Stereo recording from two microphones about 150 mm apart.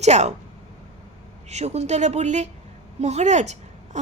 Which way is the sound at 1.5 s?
45° right (ahead or behind).